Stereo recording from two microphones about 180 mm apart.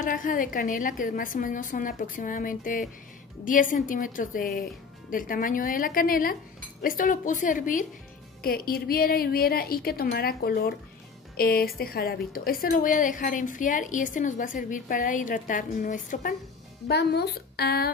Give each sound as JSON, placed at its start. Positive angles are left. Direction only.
{"t": 0.0, "sound": "a woman's voice", "side_deg": 50}
{"t": 16.8, "sound": "a woman's voice", "side_deg": 65}